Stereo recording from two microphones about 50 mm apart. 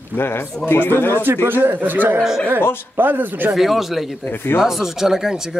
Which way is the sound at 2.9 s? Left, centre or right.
Right.